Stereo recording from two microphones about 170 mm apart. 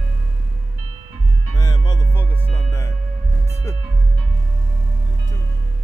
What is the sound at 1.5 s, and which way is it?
Music, 25° left (ahead or behind).